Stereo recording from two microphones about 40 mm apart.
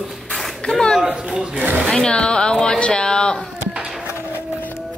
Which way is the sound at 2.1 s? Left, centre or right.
Left.